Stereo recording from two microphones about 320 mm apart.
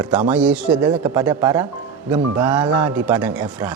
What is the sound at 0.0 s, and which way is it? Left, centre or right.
Speech, centre.